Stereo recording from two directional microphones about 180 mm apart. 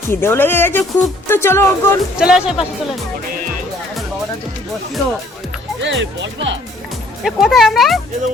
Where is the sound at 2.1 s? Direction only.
5° right (ahead or behind).